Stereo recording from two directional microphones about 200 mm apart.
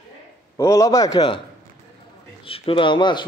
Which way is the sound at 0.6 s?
15° left (ahead or behind).